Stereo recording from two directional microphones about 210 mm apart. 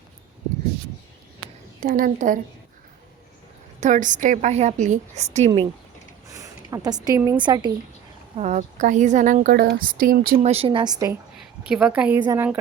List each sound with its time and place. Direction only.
1.8 s a woman's voice: 40° right (ahead or behind)
3.8 s a woman's voice: 35° right (ahead or behind)
6.2 s a sound: 15° right (ahead or behind)
7.3 s a woman's voice: 20° right (ahead or behind)
8.4 s a woman's voice: 35° right (ahead or behind)
10.3 s a woman's voice: 30° right (ahead or behind)
11.6 s a woman's voice: 5° right (ahead or behind)